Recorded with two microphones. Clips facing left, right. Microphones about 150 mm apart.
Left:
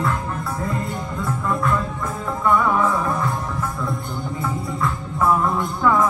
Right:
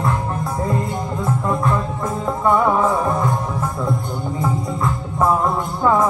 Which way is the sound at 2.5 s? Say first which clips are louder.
Right 2 dB; 25° right (ahead or behind).